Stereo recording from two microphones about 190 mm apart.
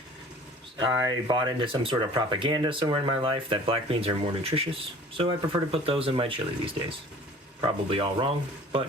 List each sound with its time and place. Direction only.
0.8 s speech: 20° right (ahead or behind)